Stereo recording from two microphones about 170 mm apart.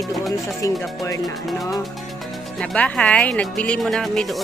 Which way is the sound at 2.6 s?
5° left (ahead or behind).